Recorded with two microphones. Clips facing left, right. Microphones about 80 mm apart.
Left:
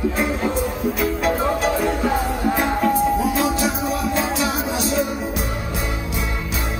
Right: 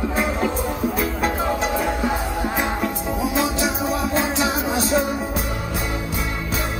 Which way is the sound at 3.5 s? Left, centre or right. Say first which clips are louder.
Left 2 dB; left.